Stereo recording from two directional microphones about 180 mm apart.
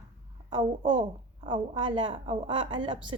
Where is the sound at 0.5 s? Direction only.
30° right (ahead or behind).